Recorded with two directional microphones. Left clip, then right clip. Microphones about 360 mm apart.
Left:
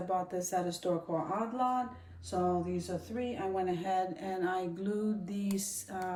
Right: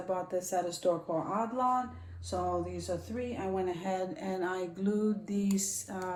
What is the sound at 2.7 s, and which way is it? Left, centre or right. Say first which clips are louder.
Speech: right 1 dB; centre.